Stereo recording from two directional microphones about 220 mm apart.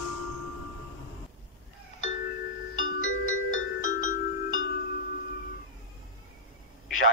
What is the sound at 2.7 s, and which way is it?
Music, 65° left (ahead or behind).